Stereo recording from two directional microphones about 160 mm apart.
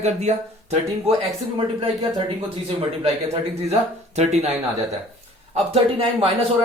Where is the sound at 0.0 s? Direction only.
45° right (ahead or behind).